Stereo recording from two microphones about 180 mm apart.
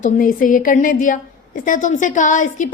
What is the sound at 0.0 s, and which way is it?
A woman's voice, 50° left (ahead or behind).